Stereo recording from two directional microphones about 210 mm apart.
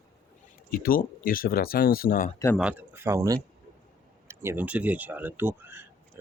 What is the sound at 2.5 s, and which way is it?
Speech, 5° right (ahead or behind).